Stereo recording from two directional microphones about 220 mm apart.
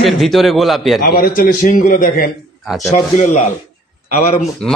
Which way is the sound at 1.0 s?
40° left (ahead or behind).